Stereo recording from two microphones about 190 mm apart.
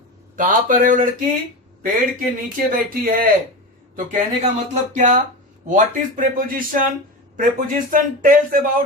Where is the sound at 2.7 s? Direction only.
45° right (ahead or behind).